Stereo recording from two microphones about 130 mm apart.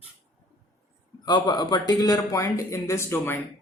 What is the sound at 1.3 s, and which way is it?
A man's voice, 35° left (ahead or behind).